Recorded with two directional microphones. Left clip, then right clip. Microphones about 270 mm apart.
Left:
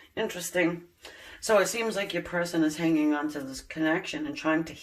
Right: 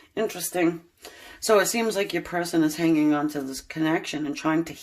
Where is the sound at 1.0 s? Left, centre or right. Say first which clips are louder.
Right 2 dB; right.